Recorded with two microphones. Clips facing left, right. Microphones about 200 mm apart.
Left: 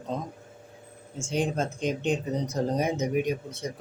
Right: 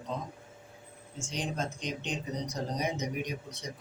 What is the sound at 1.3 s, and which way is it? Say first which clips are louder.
Speech: left 8 dB; 50° left (ahead or behind).